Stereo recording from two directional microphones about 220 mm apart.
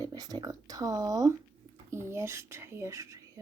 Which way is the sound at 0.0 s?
15° right (ahead or behind).